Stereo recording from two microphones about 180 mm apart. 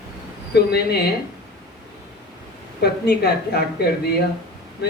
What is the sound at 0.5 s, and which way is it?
Speech, 65° left (ahead or behind).